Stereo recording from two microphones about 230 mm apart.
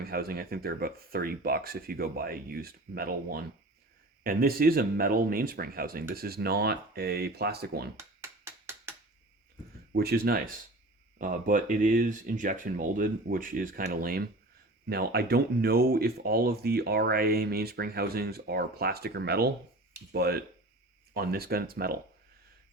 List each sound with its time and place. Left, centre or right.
0.0 s speech: right
7.9 s a sound: centre
9.9 s speech: right